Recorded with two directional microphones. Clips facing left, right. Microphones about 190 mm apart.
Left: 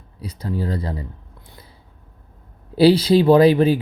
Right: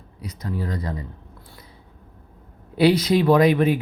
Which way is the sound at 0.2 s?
30° left (ahead or behind).